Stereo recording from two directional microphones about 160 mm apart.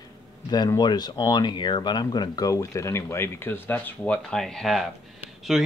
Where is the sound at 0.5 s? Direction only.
25° left (ahead or behind).